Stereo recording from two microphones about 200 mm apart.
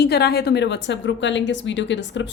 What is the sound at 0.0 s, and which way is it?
A woman's voice, 55° left (ahead or behind).